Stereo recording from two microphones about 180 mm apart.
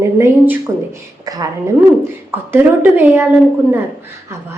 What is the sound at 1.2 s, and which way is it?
Speech, 20° right (ahead or behind).